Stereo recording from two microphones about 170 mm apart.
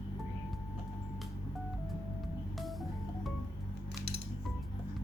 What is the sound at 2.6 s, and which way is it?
Vehicle, centre (ahead or behind).